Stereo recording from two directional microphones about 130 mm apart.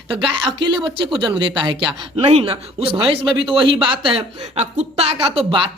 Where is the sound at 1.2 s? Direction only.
40° right (ahead or behind).